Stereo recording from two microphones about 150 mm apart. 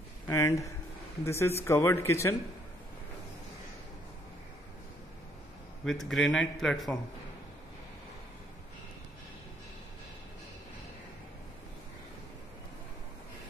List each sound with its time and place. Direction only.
0.3 s speech: 20° left (ahead or behind)
5.9 s speech: centre (ahead or behind)